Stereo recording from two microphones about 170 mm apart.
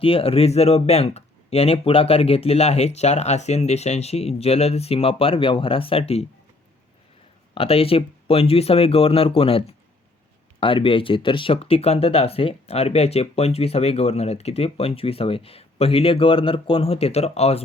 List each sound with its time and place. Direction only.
0.0 s speech: 35° left (ahead or behind)
7.5 s speech: 35° left (ahead or behind)